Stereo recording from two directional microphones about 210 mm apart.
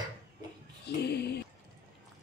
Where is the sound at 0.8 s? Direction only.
50° left (ahead or behind).